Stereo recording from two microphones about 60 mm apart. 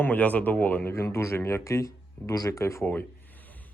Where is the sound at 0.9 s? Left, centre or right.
Left.